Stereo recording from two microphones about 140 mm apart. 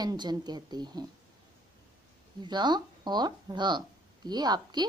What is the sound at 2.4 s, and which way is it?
A woman's voice, 30° right (ahead or behind).